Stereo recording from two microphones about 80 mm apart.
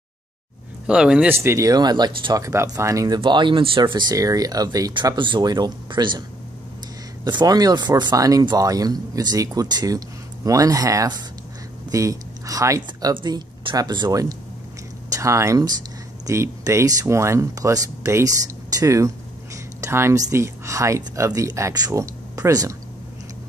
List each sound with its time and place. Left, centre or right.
0.8 s speech: centre
1.3 s speech: right
1.7 s speech: right
2.4 s speech: right
3.1 s speech: right
4.1 s speech: right
5.0 s speech: right
7.2 s speech: right
8.2 s speech: right
13.1 s speech: right
15.0 s speech: right